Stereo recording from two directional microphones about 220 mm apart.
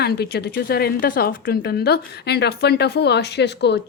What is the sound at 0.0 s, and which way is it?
A woman's voice, 45° left (ahead or behind).